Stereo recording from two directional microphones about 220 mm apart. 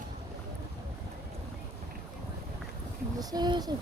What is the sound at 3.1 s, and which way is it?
Speech, 20° right (ahead or behind).